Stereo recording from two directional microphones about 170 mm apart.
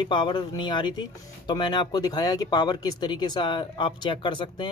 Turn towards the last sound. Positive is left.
turn(degrees=25)  # may be behind; listen again after turning